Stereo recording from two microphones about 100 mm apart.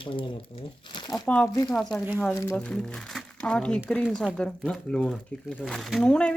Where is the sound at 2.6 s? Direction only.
10° left (ahead or behind).